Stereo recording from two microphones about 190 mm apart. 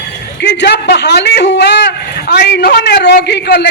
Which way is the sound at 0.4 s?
65° left (ahead or behind).